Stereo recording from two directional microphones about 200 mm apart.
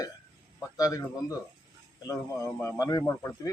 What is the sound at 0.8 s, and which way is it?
Speech, 15° left (ahead or behind).